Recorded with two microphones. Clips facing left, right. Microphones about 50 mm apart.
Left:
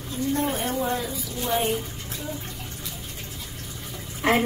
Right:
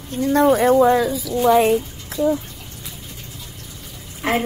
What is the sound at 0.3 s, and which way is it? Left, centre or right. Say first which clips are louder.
Speech: right 13 dB; right.